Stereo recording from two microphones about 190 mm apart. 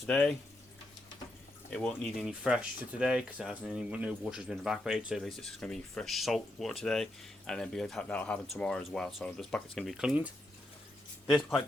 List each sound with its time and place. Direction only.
0.0 s speech: 5° left (ahead or behind)
1.7 s speech: 5° left (ahead or behind)